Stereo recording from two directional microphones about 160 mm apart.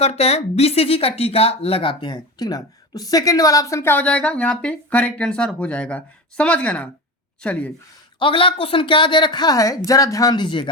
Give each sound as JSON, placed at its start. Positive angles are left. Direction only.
{"t": 0.0, "sound": "speech", "side_deg": 40}
{"t": 8.2, "sound": "speech", "side_deg": 30}